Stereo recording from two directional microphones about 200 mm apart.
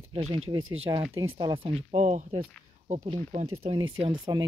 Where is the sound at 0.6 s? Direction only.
90° right.